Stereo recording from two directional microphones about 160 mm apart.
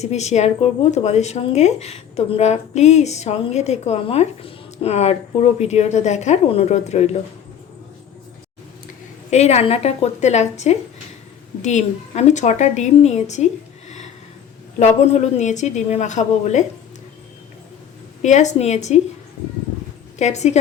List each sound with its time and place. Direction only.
0.0 s a woman's voice: 45° left (ahead or behind)
9.3 s a woman's voice: 45° left (ahead or behind)
14.8 s a woman's voice: 45° left (ahead or behind)
18.2 s a woman's voice: 50° left (ahead or behind)
20.1 s a woman's voice: 45° left (ahead or behind)